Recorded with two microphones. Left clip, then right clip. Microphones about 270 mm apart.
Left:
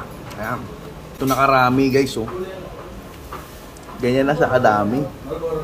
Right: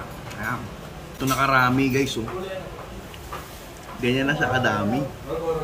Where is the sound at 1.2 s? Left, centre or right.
Right.